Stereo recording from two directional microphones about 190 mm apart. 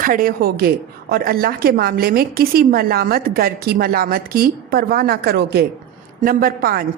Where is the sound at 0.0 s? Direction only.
50° right (ahead or behind).